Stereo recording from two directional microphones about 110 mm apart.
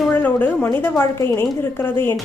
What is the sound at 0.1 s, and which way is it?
A woman's voice, 15° left (ahead or behind).